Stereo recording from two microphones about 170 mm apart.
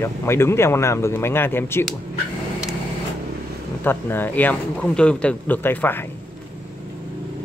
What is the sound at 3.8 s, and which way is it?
Speech, 10° left (ahead or behind).